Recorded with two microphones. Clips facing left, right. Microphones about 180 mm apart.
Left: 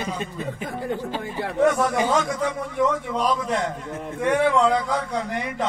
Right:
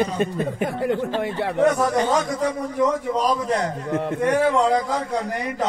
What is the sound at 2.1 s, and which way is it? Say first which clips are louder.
A man's voice: right 1 dB; 40° right (ahead or behind).